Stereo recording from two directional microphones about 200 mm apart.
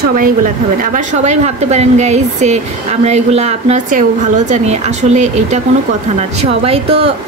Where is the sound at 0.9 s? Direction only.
35° right (ahead or behind).